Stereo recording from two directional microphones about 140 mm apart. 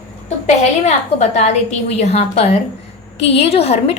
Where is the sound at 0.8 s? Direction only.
55° left (ahead or behind).